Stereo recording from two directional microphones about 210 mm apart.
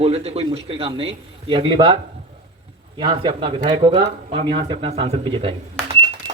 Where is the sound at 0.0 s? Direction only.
30° right (ahead or behind).